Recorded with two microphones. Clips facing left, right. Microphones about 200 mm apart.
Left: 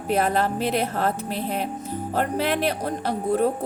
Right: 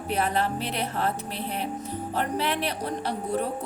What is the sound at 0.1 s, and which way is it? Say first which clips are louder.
Speech: left 4 dB; 45° left (ahead or behind).